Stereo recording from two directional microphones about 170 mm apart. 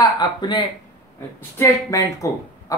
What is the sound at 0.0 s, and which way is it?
Speech, 25° left (ahead or behind).